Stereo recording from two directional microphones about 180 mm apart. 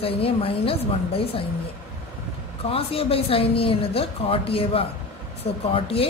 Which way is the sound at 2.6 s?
30° left (ahead or behind).